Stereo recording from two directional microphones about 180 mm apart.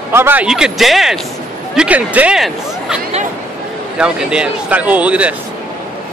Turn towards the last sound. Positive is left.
turn(degrees=-5)  # may be behind; listen again after turning